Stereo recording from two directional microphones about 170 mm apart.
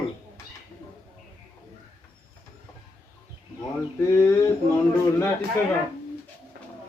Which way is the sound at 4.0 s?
15° left (ahead or behind).